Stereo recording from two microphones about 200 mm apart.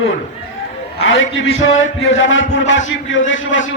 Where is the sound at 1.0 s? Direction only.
75° left (ahead or behind).